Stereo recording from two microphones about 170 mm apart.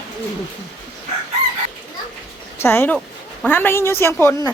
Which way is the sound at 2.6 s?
15° left (ahead or behind).